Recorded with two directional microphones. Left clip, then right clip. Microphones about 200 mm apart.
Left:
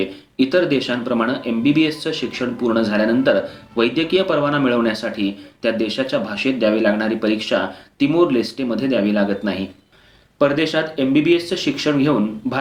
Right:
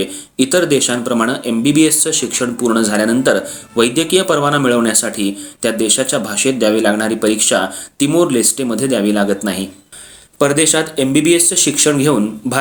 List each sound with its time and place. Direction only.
0.0 s speech: 45° right (ahead or behind)